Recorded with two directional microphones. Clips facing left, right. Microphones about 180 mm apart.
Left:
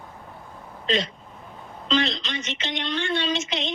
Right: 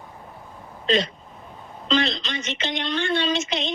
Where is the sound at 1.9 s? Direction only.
40° right (ahead or behind).